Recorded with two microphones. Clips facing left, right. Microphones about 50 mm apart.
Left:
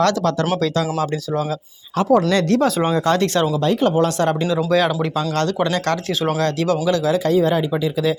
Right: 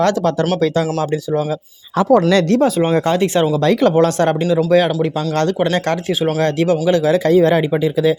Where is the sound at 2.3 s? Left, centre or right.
Right.